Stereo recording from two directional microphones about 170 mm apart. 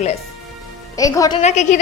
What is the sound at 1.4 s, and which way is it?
Speech, 45° left (ahead or behind).